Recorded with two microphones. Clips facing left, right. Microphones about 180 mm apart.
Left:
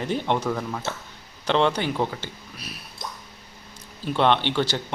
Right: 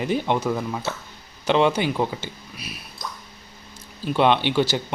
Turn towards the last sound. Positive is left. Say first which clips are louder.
# right 2 dB
turn(degrees=-10)  # may be behind; listen again after turning